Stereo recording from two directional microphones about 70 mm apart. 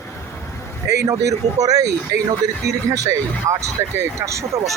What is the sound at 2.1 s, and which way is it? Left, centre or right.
Speech, right.